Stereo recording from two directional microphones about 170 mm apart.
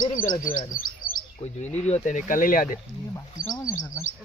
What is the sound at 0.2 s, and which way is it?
Speech, 50° left (ahead or behind).